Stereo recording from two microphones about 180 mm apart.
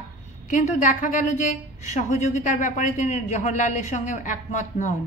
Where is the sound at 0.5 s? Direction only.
45° left (ahead or behind).